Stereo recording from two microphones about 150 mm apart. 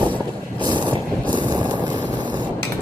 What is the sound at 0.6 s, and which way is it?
Vehicle, 30° right (ahead or behind).